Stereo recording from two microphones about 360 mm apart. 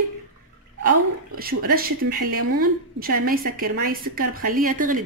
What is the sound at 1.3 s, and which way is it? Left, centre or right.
A woman's voice, right.